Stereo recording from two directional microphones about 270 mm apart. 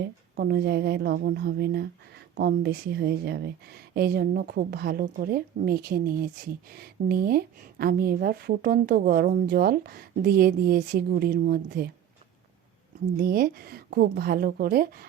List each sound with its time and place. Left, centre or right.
0.0 s speech: right
13.1 s speech: right